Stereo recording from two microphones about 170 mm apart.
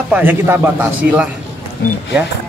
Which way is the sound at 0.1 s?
10° right (ahead or behind).